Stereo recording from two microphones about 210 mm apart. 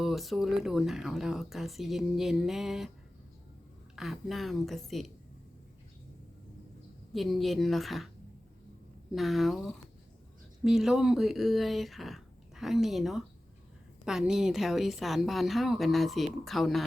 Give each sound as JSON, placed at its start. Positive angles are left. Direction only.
{"t": 0.0, "sound": "speech", "side_deg": 0}
{"t": 3.9, "sound": "speech", "side_deg": 0}
{"t": 7.1, "sound": "speech", "side_deg": 0}
{"t": 9.1, "sound": "speech", "side_deg": 0}
{"t": 10.6, "sound": "speech", "side_deg": 0}